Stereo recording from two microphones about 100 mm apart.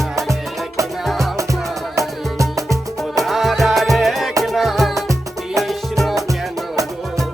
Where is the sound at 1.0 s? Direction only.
Centre (ahead or behind).